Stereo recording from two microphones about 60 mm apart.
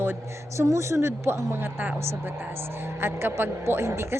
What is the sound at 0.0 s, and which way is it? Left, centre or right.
A woman's voice, right.